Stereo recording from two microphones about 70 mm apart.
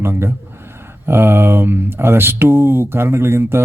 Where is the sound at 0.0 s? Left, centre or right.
Right.